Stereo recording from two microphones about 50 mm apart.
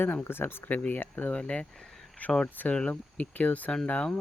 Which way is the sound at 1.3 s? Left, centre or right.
Left.